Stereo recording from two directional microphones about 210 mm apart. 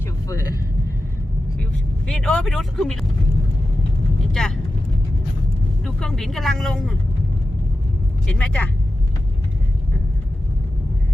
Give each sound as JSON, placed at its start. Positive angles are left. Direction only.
{"t": 0.3, "sound": "vehicle", "side_deg": 15}
{"t": 2.0, "sound": "speech", "side_deg": 5}
{"t": 4.3, "sound": "speech", "side_deg": 0}
{"t": 5.8, "sound": "speech", "side_deg": 0}
{"t": 8.3, "sound": "speech", "side_deg": 5}